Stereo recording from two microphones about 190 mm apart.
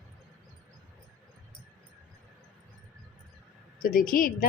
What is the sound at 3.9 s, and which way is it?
Speech, 45° left (ahead or behind).